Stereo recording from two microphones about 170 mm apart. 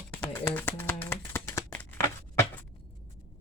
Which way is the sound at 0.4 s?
10° left (ahead or behind).